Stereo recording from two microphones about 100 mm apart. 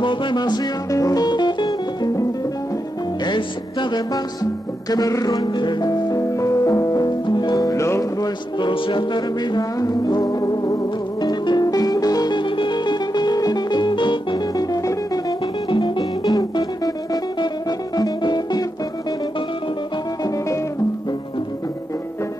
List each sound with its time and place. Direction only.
0.0 s music: 55° left (ahead or behind)
3.3 s music: 50° left (ahead or behind)
7.2 s music: 45° left (ahead or behind)
8.6 s music: 60° left (ahead or behind); by 15.3 s 35° left (ahead or behind)
15.7 s music: 55° left (ahead or behind)
16.0 s music: 40° left (ahead or behind)
20.2 s music: 30° left (ahead or behind)